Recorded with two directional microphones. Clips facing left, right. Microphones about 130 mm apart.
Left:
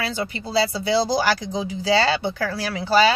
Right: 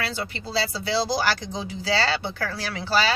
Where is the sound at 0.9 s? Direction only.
15° left (ahead or behind).